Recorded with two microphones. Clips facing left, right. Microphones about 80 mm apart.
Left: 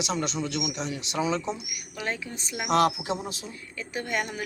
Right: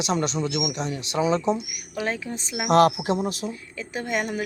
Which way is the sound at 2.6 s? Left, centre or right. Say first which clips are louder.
Right 5 dB; right.